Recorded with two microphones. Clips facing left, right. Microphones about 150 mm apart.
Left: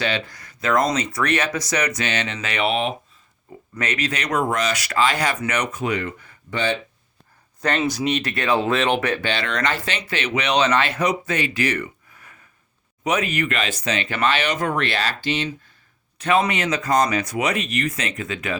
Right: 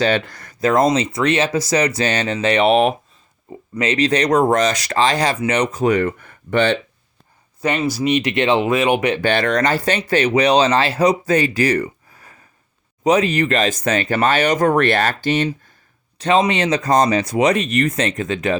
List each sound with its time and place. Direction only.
0.3 s speech: 60° right (ahead or behind)
0.6 s speech: 30° right (ahead or behind)
3.8 s speech: 30° right (ahead or behind)
5.8 s speech: 50° right (ahead or behind)
7.8 s speech: 5° right (ahead or behind)
9.2 s speech: 45° right (ahead or behind)
16.1 s speech: 30° right (ahead or behind)